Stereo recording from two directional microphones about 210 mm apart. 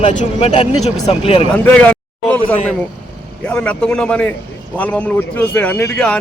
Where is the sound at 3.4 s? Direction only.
5° left (ahead or behind).